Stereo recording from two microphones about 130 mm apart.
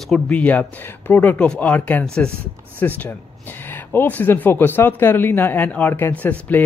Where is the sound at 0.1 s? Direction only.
10° left (ahead or behind).